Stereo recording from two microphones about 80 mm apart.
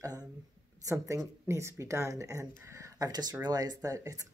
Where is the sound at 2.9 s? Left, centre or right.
Right.